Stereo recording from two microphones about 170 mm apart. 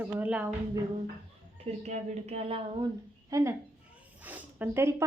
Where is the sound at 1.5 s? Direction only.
40° right (ahead or behind).